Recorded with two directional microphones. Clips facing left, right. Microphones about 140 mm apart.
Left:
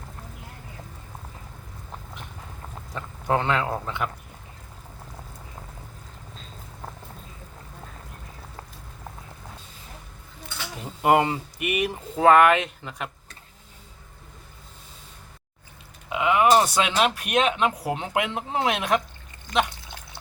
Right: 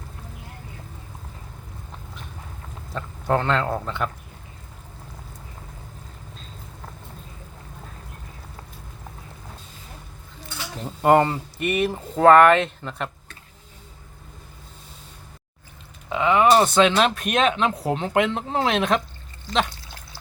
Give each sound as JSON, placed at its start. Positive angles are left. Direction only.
{"t": 2.9, "sound": "speech", "side_deg": 15}
{"t": 11.0, "sound": "speech", "side_deg": 10}
{"t": 16.1, "sound": "speech", "side_deg": 10}
{"t": 19.5, "sound": "water", "side_deg": 20}